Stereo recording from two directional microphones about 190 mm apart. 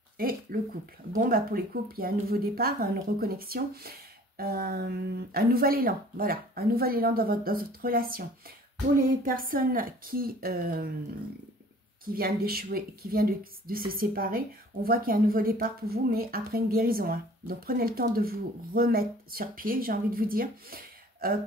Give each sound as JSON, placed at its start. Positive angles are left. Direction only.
{"t": 0.2, "sound": "a woman's voice", "side_deg": -50}
{"t": 12.1, "sound": "a woman's voice", "side_deg": -50}